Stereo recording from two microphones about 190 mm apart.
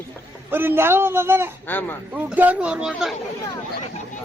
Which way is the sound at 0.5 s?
10° right (ahead or behind).